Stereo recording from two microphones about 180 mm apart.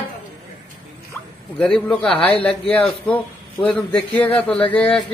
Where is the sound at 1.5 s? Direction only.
5° left (ahead or behind).